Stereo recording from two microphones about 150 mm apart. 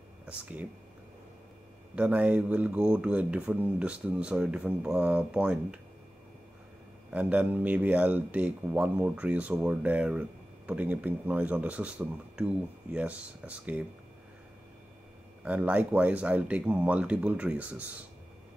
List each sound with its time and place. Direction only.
0.3 s speech: 10° right (ahead or behind)
2.0 s speech: 10° right (ahead or behind)
7.1 s speech: 10° right (ahead or behind)
15.4 s speech: 10° right (ahead or behind)